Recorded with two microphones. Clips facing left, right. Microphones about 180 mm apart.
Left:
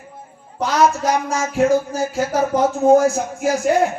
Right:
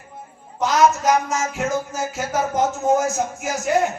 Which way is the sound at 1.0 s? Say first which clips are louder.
Even; 35° left (ahead or behind).